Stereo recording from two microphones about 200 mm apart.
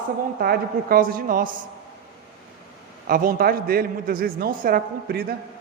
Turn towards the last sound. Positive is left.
turn(degrees=-50)  # may be behind; listen again after turning